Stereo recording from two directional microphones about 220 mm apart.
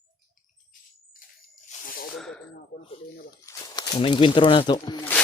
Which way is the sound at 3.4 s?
20° left (ahead or behind).